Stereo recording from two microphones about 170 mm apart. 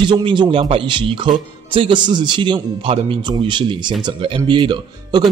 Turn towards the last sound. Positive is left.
turn(degrees=-25)  # may be behind; listen again after turning